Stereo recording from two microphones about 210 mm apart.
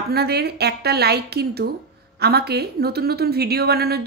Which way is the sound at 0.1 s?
50° right (ahead or behind).